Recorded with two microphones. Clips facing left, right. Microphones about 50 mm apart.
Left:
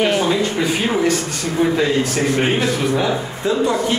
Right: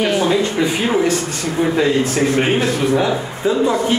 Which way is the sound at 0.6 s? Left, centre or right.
Centre.